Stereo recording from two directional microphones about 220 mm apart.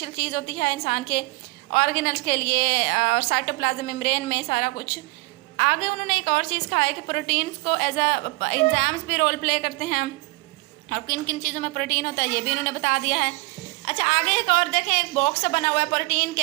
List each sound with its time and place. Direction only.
0.0 s a woman's voice: 40° left (ahead or behind)